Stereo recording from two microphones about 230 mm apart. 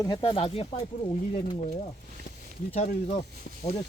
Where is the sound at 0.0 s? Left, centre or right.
Centre.